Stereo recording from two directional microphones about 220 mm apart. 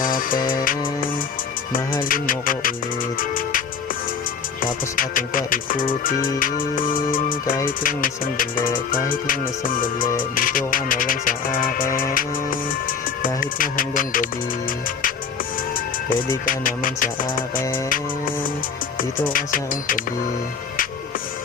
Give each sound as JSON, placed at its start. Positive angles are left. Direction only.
{"t": 0.0, "sound": "music", "side_deg": 40}
{"t": 2.0, "sound": "music", "side_deg": 40}
{"t": 4.6, "sound": "music", "side_deg": 40}
{"t": 16.5, "sound": "music", "side_deg": 40}
{"t": 19.3, "sound": "music", "side_deg": 40}